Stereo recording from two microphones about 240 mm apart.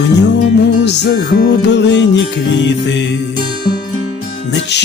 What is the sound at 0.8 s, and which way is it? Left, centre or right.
Music, left.